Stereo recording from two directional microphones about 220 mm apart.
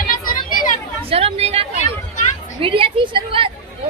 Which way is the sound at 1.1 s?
25° right (ahead or behind).